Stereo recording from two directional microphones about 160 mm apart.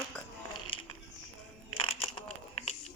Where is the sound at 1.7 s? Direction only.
35° left (ahead or behind).